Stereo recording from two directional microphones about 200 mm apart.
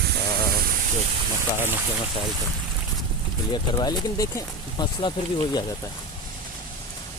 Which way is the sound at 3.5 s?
20° left (ahead or behind).